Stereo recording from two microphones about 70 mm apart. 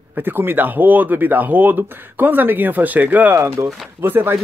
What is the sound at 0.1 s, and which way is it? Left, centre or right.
Speech, right.